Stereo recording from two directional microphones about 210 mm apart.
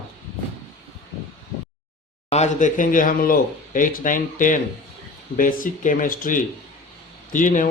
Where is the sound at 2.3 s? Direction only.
35° left (ahead or behind).